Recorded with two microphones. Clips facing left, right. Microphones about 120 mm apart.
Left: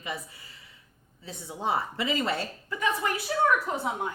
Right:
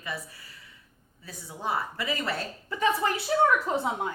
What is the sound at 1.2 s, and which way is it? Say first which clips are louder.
A woman's voice: left 2 dB; 25° left (ahead or behind).